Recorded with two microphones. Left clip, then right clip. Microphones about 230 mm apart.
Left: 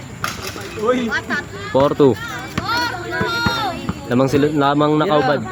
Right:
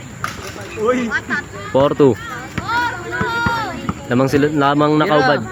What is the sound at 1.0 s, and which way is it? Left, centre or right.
Speech, left.